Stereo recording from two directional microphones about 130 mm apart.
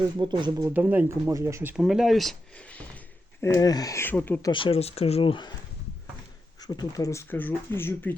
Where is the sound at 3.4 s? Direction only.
25° left (ahead or behind).